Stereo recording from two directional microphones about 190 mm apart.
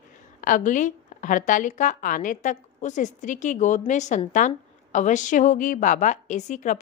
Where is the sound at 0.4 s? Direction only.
45° left (ahead or behind).